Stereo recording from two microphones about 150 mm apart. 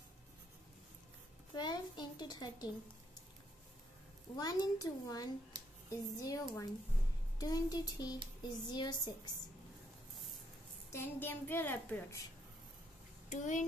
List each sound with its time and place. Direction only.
1.5 s a sound: 30° left (ahead or behind)
4.4 s a child's voice: 25° left (ahead or behind)
5.5 s a sound: 30° right (ahead or behind)
5.9 s a child's voice: 25° left (ahead or behind)
10.9 s a woman's voice: 15° left (ahead or behind)
13.3 s a child's voice: 55° left (ahead or behind)